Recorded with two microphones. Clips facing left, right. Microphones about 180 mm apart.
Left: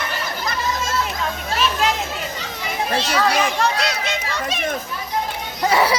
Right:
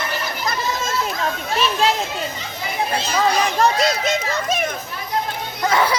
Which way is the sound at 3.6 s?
40° right (ahead or behind).